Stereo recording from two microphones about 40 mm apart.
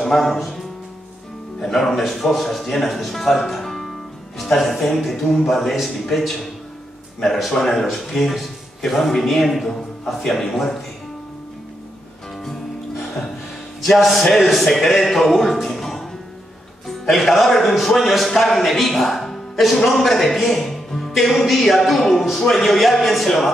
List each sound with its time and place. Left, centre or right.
0.0 s speech: centre
1.6 s a man's voice: centre
13.7 s a man's voice: centre